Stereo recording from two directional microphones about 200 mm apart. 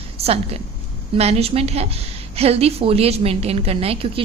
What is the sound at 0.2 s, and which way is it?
A woman's voice, 30° right (ahead or behind).